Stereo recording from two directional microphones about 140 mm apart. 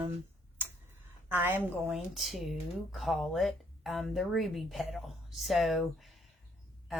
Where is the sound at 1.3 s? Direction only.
15° right (ahead or behind).